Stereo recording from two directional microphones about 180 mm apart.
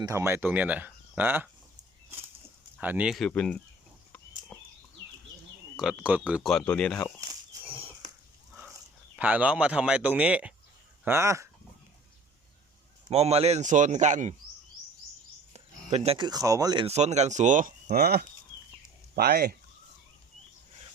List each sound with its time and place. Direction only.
0.0 s speech: 15° right (ahead or behind)
2.8 s speech: 10° right (ahead or behind)
4.5 s a sound: 10° left (ahead or behind)
5.7 s speech: 5° right (ahead or behind)
7.6 s a sound: 10° right (ahead or behind)
9.1 s speech: 10° right (ahead or behind)
13.1 s speech: 35° right (ahead or behind)
15.5 s speech: 35° right (ahead or behind); by 16.8 s 20° right (ahead or behind)
16.8 s speech: 35° right (ahead or behind); by 19.5 s 60° right (ahead or behind)